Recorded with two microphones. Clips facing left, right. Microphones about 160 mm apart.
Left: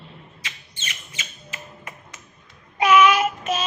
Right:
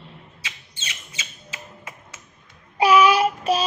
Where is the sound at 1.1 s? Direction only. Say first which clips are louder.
Left 1 dB; 10° right (ahead or behind).